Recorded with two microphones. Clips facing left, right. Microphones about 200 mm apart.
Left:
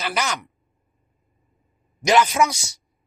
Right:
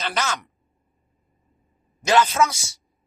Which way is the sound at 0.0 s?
15° left (ahead or behind).